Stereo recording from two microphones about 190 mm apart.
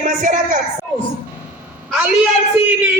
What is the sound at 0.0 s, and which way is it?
Speech, 45° right (ahead or behind).